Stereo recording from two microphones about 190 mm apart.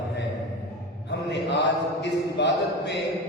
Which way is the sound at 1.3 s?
65° left (ahead or behind).